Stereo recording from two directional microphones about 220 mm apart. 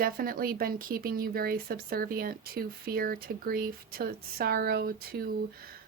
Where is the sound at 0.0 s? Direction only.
40° right (ahead or behind).